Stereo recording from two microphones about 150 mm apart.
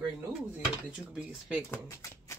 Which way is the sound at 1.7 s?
20° left (ahead or behind).